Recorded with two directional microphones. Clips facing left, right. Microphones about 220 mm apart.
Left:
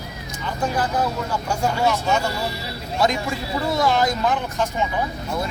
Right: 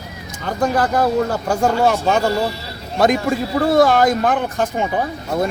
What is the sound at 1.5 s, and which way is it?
Speech, 50° right (ahead or behind).